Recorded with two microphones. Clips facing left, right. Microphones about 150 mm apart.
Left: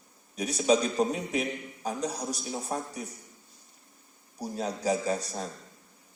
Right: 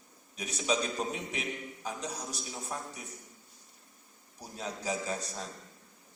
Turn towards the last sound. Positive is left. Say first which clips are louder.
# left 6 dB
turn(degrees=40)  # may be behind; listen again after turning